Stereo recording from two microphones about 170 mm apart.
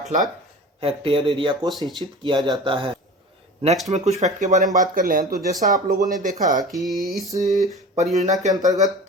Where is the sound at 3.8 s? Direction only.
40° right (ahead or behind).